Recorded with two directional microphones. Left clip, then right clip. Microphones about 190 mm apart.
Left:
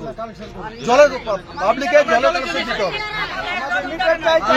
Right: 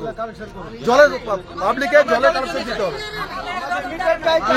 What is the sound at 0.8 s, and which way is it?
Speech, 25° right (ahead or behind).